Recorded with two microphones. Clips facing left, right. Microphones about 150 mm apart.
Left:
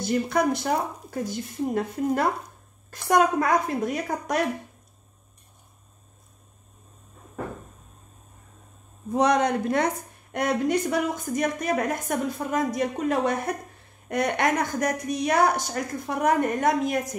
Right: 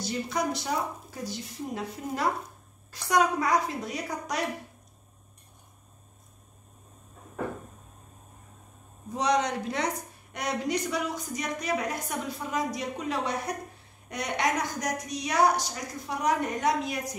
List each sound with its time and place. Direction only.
0.0 s a woman's voice: 55° left (ahead or behind)
9.1 s a woman's voice: 55° left (ahead or behind)